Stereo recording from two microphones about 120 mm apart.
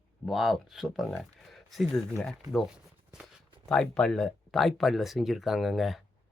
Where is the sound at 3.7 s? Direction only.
5° left (ahead or behind).